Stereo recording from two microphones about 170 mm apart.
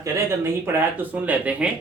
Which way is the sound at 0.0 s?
15° right (ahead or behind).